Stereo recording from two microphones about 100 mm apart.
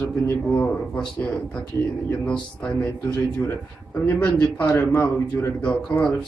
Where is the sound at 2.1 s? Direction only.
10° left (ahead or behind).